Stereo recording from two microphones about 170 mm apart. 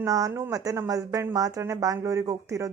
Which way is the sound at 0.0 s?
20° right (ahead or behind).